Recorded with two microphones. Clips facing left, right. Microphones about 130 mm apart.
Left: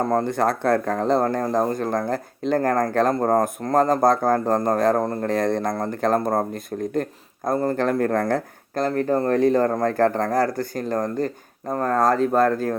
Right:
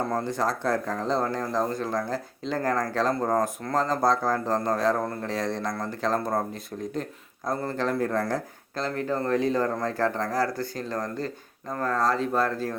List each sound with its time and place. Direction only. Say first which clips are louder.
0.0 s speech: left 6 dB; 45° left (ahead or behind)